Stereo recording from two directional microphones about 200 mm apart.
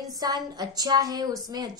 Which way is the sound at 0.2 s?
20° right (ahead or behind).